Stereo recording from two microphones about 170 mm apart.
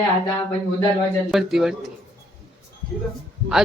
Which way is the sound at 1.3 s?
Centre (ahead or behind).